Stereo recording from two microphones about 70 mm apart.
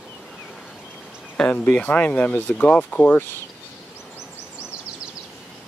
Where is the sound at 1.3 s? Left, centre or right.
Centre.